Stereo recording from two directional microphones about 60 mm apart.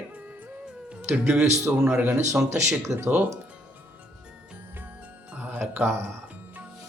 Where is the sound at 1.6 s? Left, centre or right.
Right.